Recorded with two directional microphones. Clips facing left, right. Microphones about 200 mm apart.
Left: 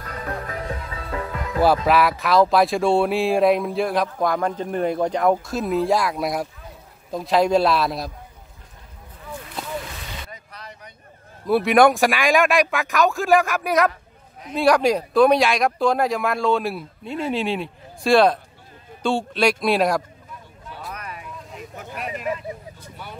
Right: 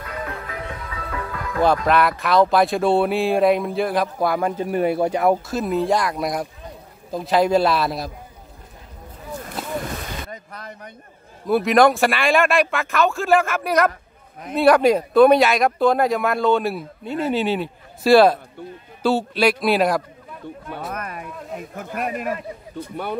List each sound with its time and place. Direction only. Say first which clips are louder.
0.0 s music: even; 40° left (ahead or behind); by 1.6 s 20° left (ahead or behind)
1.9 s speech: even; centre (ahead or behind)
9.3 s boat: right 4 dB; 45° right (ahead or behind)
9.8 s vehicle: right 5 dB; 50° right (ahead or behind)
11.4 s speech: even; centre (ahead or behind)
11.9 s speech: even; 15° left (ahead or behind)
13.2 s speech: even; centre (ahead or behind)
20.9 s a sound: right 5 dB; 50° right (ahead or behind)